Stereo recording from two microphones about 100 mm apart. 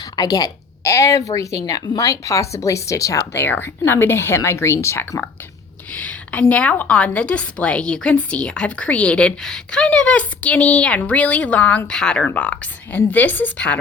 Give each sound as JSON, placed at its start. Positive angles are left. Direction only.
{"t": 0.2, "sound": "a woman's voice", "side_deg": 40}
{"t": 3.3, "sound": "a woman's voice", "side_deg": 20}
{"t": 5.9, "sound": "a woman's voice", "side_deg": 15}